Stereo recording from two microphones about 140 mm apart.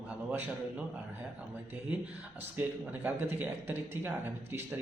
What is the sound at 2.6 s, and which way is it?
A man's voice, 15° right (ahead or behind).